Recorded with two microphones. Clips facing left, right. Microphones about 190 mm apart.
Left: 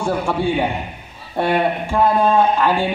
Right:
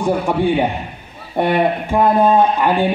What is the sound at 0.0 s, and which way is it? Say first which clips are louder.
Speech: right 3 dB; 15° right (ahead or behind).